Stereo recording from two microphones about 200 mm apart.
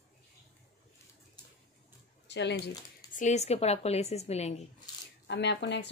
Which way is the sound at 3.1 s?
35° left (ahead or behind).